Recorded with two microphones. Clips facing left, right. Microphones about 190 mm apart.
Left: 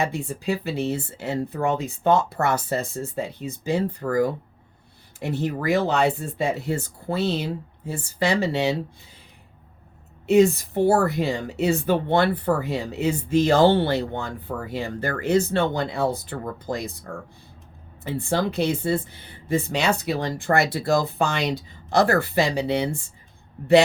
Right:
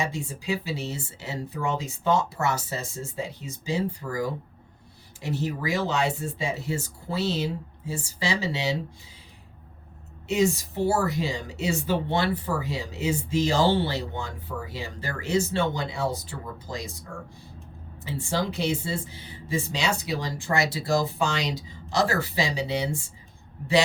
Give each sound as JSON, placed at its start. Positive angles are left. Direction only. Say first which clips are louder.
{"t": 0.0, "sound": "a woman's voice", "louder": "left 5 dB", "side_deg": 55}
{"t": 10.2, "sound": "a woman's voice", "louder": "left 7 dB", "side_deg": 55}
{"t": 18.0, "sound": "a woman's voice", "louder": "left 4 dB", "side_deg": 55}